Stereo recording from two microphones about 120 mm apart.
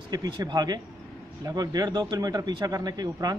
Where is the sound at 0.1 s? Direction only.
35° right (ahead or behind).